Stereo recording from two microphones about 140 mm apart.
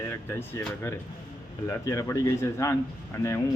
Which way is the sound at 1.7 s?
20° left (ahead or behind).